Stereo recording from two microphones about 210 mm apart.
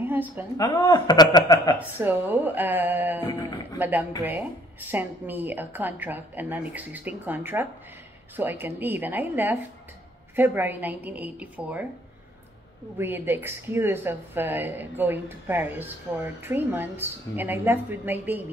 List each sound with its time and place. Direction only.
0.0 s a sound: 10° right (ahead or behind)
0.6 s speech: 20° left (ahead or behind)
1.8 s a woman's voice: 10° right (ahead or behind)
3.3 s speech: 20° left (ahead or behind)
3.7 s a woman's voice: 10° right (ahead or behind)
12.9 s a woman's voice: 10° right (ahead or behind)